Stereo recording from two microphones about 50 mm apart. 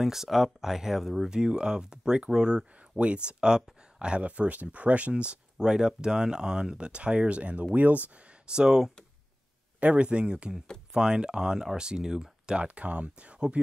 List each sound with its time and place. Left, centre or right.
0.0 s speech: centre; by 8.1 s right
8.5 s speech: centre
9.8 s speech: right
12.6 s speech: right